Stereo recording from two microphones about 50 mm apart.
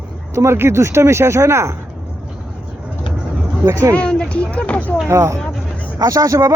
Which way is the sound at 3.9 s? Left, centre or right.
Left.